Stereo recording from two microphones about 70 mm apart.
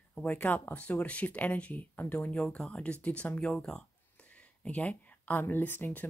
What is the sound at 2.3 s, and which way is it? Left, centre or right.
Speech, centre.